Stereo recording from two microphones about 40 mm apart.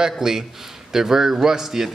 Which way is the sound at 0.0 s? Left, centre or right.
Centre.